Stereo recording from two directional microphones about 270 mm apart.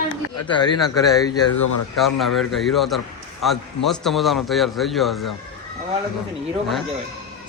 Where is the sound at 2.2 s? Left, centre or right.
Centre.